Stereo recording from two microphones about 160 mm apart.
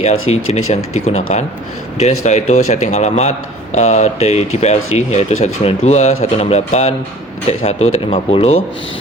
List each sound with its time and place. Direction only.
0.0 s speech: 40° left (ahead or behind)